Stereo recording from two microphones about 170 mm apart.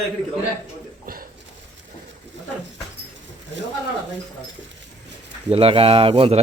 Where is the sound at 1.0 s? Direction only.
55° right (ahead or behind).